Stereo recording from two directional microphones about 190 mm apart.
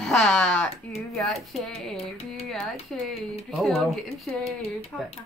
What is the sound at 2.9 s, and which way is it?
Speech, centre (ahead or behind).